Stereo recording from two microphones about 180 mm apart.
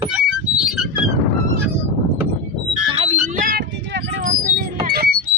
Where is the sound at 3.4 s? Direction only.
50° right (ahead or behind).